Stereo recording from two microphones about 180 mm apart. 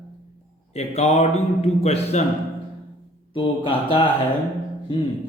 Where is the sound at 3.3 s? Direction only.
30° left (ahead or behind).